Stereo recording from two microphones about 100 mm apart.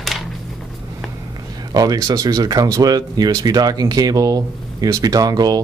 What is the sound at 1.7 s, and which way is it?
Speech, 40° right (ahead or behind).